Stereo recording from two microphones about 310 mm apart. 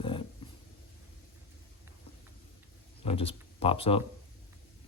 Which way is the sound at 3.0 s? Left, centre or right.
Centre.